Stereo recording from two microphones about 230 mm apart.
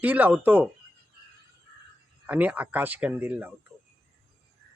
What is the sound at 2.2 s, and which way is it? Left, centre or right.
Speech, centre.